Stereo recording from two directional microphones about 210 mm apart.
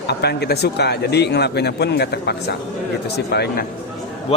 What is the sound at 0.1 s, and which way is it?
Speech, 50° left (ahead or behind).